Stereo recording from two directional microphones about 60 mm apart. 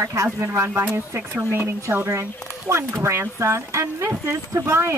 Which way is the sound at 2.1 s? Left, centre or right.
Right.